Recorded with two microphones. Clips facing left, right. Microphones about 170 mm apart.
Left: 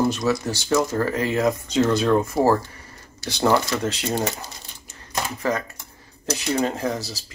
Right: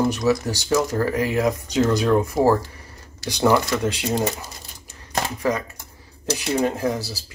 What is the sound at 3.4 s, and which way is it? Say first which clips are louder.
Speech: right 1 dB; centre (ahead or behind).